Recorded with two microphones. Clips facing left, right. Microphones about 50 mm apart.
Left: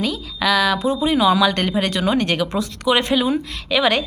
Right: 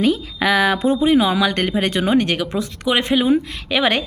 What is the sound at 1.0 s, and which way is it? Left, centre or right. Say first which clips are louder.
A woman's voice: left 1 dB; centre.